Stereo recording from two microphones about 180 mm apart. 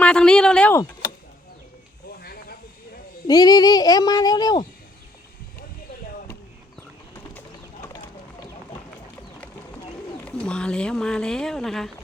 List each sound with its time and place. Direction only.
0.0 s a sound: 5° left (ahead or behind)
2.2 s hiss: 55° left (ahead or behind)
3.2 s speech: 20° left (ahead or behind)
10.2 s speech: 5° left (ahead or behind)